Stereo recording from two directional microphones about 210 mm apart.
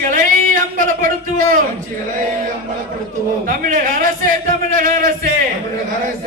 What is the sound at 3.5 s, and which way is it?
Speech, 40° right (ahead or behind).